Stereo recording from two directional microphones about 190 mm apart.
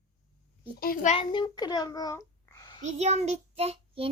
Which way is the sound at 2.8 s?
35° right (ahead or behind).